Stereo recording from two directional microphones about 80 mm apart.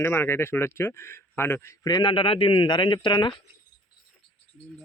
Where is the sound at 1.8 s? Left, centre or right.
Left.